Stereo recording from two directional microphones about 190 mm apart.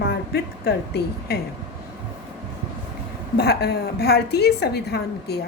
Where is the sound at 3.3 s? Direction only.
55° left (ahead or behind).